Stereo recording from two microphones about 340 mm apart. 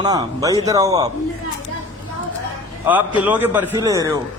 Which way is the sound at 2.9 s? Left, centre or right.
Centre.